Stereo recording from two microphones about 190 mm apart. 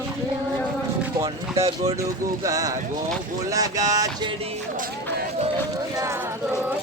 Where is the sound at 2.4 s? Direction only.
15° right (ahead or behind).